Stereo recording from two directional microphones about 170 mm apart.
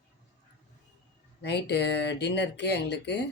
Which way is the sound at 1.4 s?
80° left.